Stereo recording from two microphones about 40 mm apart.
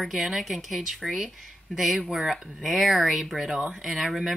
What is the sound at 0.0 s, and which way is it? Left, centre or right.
Speech, centre.